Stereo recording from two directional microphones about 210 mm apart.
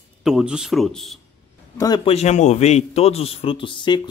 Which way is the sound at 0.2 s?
5° right (ahead or behind).